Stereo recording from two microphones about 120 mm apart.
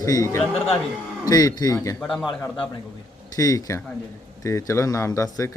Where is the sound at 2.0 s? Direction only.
5° left (ahead or behind).